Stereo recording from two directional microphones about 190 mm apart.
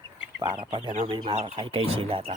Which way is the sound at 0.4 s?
25° right (ahead or behind).